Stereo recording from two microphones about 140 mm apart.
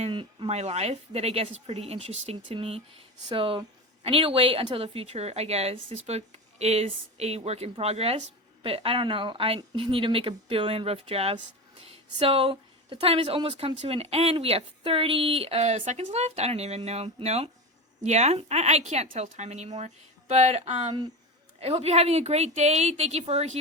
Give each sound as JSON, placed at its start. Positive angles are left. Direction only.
{"t": 0.1, "sound": "a woman's voice", "side_deg": -40}